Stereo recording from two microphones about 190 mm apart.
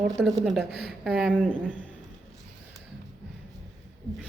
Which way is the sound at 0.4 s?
Centre (ahead or behind).